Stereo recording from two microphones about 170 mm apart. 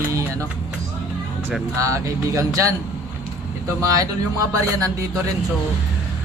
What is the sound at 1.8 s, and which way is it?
Speech, 20° right (ahead or behind).